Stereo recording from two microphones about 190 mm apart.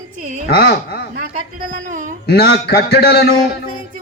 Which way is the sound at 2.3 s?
60° left (ahead or behind).